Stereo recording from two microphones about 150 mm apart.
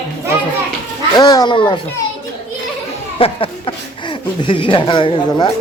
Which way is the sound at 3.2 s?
40° left (ahead or behind).